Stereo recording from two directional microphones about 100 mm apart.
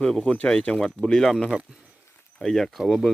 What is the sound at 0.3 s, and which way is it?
Speech, 10° left (ahead or behind).